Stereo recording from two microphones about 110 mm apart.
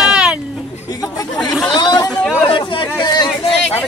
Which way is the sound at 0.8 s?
35° left (ahead or behind).